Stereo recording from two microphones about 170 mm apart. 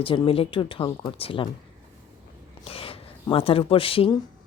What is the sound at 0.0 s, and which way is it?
Speech, 30° left (ahead or behind).